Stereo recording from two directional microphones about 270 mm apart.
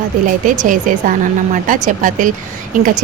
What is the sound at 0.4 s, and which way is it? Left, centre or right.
A woman's voice, right.